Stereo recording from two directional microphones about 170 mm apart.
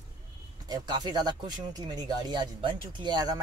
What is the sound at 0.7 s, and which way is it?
Speech, 25° right (ahead or behind).